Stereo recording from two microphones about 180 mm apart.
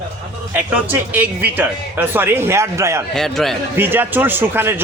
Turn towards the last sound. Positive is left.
turn(degrees=-10)  # may be behind; listen again after turning